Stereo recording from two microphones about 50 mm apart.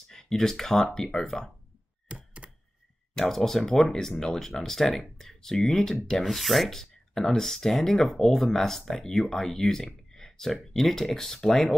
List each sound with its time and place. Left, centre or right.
0.1 s speech: centre
2.4 s typewriter: right
3.2 s speech: centre